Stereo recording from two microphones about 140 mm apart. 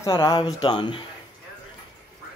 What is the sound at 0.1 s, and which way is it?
Speech, 35° left (ahead or behind).